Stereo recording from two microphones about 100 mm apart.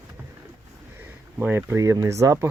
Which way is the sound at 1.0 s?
20° right (ahead or behind).